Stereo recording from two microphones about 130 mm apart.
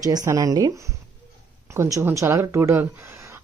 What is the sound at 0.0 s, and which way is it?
Speech, 30° right (ahead or behind).